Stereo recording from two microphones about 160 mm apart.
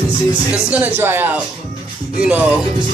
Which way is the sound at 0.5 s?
10° right (ahead or behind).